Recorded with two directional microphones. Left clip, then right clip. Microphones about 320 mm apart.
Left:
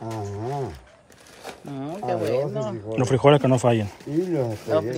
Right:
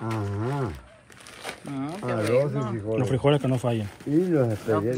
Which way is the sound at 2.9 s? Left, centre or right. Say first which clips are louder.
Left 6 dB; centre.